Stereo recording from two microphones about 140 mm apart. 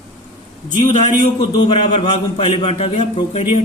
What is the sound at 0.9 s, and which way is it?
Speech, 55° left (ahead or behind).